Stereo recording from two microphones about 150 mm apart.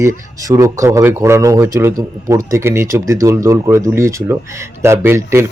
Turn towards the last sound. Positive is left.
turn(degrees=-15)  # may be behind; listen again after turning